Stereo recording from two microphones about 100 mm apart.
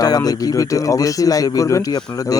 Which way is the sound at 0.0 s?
40° left (ahead or behind).